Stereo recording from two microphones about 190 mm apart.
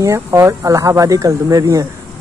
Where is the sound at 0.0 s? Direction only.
15° right (ahead or behind).